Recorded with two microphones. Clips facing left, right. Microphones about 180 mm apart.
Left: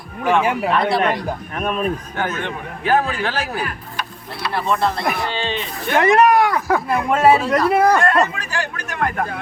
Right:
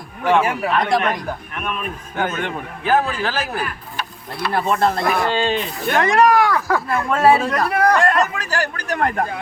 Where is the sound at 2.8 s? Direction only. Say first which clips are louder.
Even; centre (ahead or behind).